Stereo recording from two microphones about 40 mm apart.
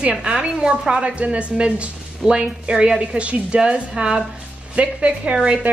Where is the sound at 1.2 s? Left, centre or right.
Right.